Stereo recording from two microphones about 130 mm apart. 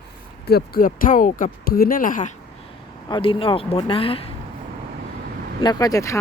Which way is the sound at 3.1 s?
45° left (ahead or behind).